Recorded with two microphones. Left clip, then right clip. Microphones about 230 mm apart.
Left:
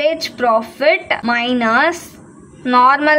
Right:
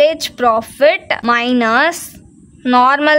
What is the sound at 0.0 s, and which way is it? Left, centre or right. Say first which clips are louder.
A woman's voice: right 4 dB; right.